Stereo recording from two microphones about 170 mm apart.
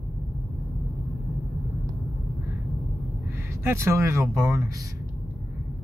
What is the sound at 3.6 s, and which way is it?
Speech, 15° right (ahead or behind).